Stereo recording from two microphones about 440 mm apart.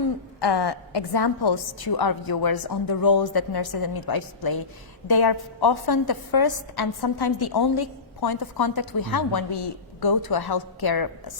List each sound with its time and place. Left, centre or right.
0.3 s a woman's voice: left